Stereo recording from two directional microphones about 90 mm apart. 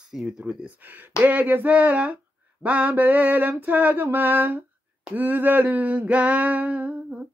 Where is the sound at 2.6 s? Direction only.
15° right (ahead or behind).